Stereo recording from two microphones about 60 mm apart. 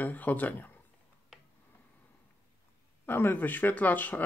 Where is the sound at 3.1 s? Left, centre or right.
Left.